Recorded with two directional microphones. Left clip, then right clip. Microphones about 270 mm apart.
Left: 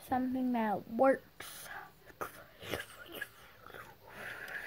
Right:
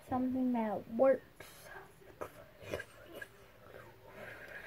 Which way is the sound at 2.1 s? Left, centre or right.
Left.